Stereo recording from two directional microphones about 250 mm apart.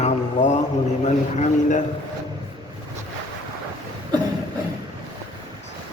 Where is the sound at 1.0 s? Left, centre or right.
Left.